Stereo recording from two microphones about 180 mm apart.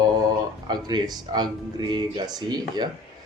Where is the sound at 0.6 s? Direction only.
25° right (ahead or behind).